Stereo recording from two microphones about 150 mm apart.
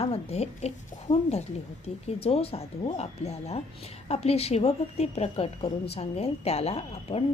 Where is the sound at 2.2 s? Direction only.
40° left (ahead or behind).